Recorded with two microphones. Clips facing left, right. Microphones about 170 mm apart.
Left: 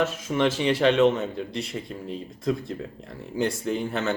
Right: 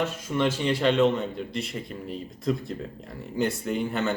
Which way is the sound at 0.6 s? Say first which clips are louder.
Left 3 dB; 10° left (ahead or behind).